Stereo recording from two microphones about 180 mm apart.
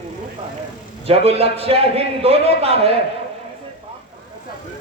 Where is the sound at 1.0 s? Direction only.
35° right (ahead or behind).